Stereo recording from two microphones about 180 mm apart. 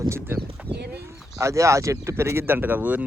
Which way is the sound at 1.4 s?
15° right (ahead or behind).